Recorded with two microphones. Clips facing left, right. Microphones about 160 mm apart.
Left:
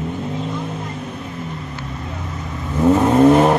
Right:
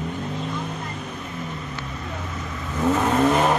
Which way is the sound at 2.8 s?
20° left (ahead or behind).